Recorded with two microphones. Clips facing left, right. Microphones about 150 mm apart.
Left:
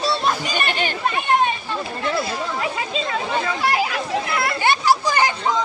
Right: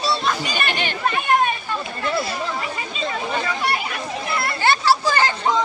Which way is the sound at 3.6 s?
90° left.